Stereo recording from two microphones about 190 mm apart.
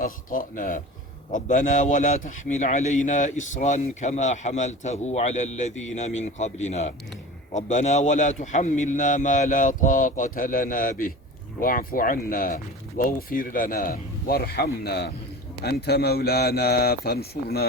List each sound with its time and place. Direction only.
0.0 s a man's voice: 45° left (ahead or behind)